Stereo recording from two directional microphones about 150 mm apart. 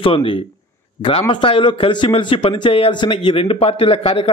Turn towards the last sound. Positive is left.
turn(degrees=40)  # may be behind; listen again after turning